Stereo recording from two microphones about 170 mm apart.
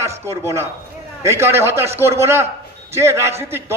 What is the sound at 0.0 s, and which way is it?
A man's voice, 15° right (ahead or behind).